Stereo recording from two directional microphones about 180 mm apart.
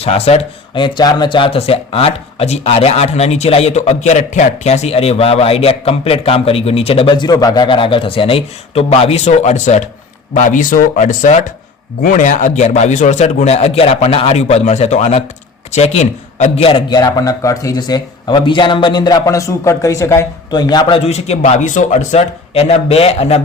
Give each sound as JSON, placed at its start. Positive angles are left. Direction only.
{"t": 0.0, "sound": "a man's voice", "side_deg": 35}